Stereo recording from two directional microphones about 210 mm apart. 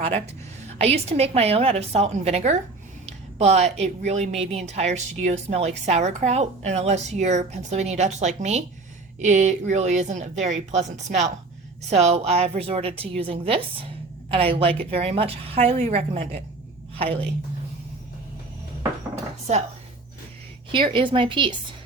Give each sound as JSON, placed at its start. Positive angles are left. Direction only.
{"t": 0.8, "sound": "a woman's voice", "side_deg": -30}
{"t": 20.7, "sound": "a woman's voice", "side_deg": -25}